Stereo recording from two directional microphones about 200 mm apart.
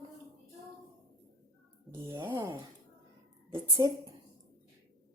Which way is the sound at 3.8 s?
20° right (ahead or behind).